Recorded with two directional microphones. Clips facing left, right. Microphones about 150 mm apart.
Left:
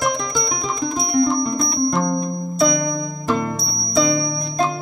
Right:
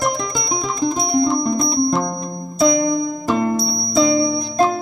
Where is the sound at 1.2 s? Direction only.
Centre (ahead or behind).